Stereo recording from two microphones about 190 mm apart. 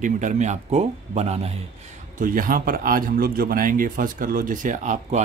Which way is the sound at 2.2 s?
45° right (ahead or behind).